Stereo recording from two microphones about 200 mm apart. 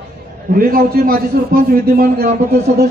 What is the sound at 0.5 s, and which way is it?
A man's voice, 45° right (ahead or behind).